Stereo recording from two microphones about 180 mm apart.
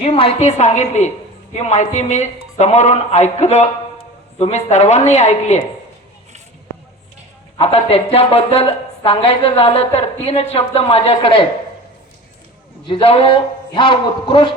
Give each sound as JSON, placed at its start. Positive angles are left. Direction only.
{"t": 0.0, "sound": "a woman's voice", "side_deg": 30}
{"t": 7.6, "sound": "a woman's voice", "side_deg": 35}
{"t": 12.9, "sound": "a man's voice", "side_deg": 30}